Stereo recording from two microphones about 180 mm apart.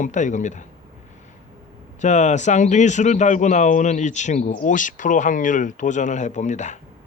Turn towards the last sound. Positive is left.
turn(degrees=40)  # may be behind; listen again after turning